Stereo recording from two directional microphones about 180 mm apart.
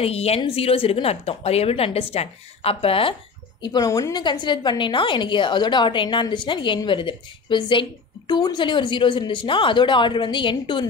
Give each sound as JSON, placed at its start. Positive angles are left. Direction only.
{"t": 0.0, "sound": "a woman's voice", "side_deg": 35}